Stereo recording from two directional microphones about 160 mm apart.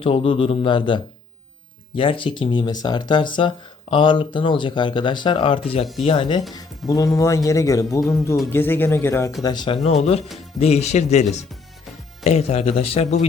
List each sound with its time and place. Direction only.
0.0 s speech: 35° left (ahead or behind); by 9.3 s 15° left (ahead or behind)
9.4 s speech: 25° left (ahead or behind)